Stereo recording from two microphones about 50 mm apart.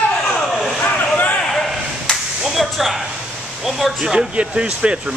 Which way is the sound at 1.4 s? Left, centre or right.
Centre.